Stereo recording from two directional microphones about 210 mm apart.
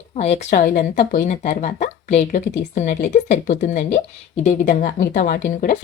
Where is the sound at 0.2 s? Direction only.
30° left (ahead or behind).